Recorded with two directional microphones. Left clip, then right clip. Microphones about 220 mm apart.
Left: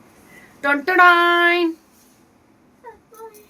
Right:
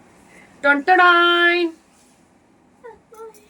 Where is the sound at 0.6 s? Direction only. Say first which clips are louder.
Even; 10° left (ahead or behind).